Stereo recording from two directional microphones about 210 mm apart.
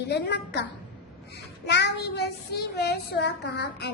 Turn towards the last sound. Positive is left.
turn(degrees=55)  # may be behind; listen again after turning